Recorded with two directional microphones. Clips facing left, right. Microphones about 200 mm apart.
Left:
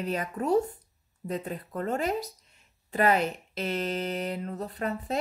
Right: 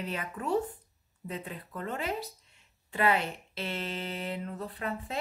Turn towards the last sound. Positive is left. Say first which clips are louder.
# left 5 dB
turn(degrees=40)  # may be behind; listen again after turning